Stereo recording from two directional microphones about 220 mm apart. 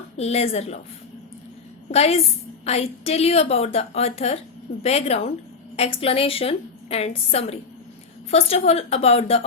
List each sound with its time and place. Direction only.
0.2 s a woman's voice: 30° left (ahead or behind)
1.9 s a woman's voice: 30° left (ahead or behind)